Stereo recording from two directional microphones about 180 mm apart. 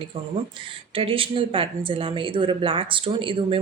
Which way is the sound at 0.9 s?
30° right (ahead or behind).